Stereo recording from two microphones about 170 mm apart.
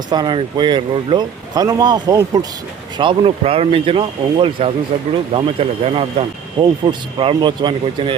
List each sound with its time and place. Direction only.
0.1 s speech: 25° right (ahead or behind)
3.0 s speech: 30° right (ahead or behind)